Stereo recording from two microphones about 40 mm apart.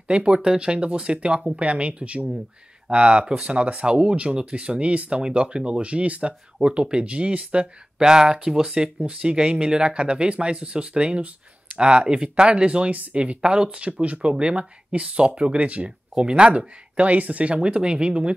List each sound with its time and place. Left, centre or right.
0.1 s speech: right
8.0 s speech: centre
12.9 s speech: right
13.2 s speech: right
16.3 s speech: right
17.6 s speech: right